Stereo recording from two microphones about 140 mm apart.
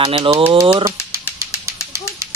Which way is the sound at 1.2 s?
20° left (ahead or behind).